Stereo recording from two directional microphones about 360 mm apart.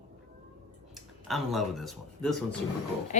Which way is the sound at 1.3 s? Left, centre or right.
Centre.